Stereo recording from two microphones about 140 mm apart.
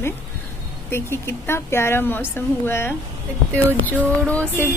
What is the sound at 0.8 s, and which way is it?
A woman's voice, 15° left (ahead or behind).